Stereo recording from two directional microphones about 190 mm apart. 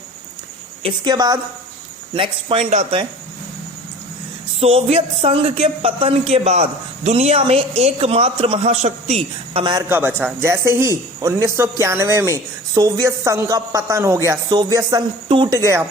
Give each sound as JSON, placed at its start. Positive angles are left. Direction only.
{"t": 0.8, "sound": "speech", "side_deg": -25}
{"t": 4.6, "sound": "speech", "side_deg": -30}
{"t": 9.9, "sound": "speech", "side_deg": -10}